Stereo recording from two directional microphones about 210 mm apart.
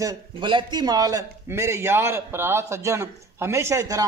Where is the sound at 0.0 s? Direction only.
20° right (ahead or behind).